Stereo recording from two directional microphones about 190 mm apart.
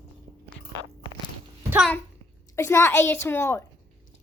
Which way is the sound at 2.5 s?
15° left (ahead or behind).